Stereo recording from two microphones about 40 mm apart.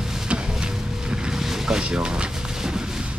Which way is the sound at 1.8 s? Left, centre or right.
Right.